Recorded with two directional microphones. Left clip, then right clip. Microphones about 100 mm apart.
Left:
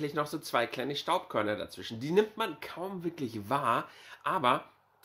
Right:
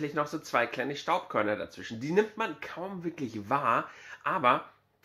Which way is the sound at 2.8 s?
20° left (ahead or behind).